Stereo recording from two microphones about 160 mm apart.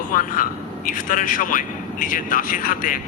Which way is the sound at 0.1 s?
55° left (ahead or behind).